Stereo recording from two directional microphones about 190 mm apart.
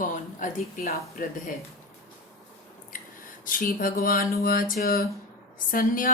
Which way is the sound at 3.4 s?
50° left (ahead or behind).